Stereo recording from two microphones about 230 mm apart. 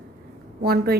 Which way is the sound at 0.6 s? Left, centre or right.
Right.